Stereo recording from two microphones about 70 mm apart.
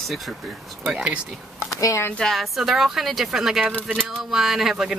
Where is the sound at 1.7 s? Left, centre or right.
Left.